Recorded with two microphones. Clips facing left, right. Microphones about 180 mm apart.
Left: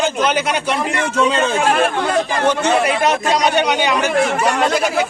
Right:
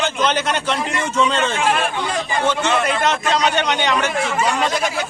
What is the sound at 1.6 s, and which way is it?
Speech, 45° left (ahead or behind).